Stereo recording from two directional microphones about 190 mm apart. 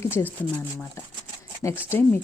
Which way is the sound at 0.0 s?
10° left (ahead or behind).